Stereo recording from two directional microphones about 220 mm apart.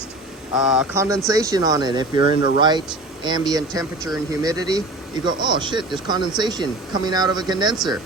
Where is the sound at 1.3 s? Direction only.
15° right (ahead or behind).